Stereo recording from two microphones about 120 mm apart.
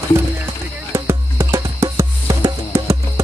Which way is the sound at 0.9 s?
20° right (ahead or behind).